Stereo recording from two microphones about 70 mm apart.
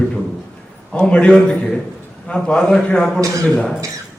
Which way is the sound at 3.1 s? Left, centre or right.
Right.